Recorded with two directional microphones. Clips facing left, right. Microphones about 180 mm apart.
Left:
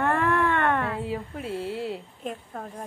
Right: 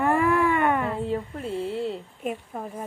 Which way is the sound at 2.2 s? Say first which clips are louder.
Right 4 dB; 10° right (ahead or behind).